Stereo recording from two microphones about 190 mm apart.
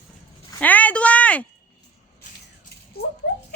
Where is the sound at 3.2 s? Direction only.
60° left (ahead or behind).